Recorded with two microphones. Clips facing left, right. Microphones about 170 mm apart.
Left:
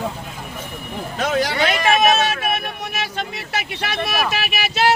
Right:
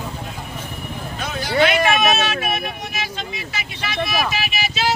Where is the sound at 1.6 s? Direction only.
45° left (ahead or behind).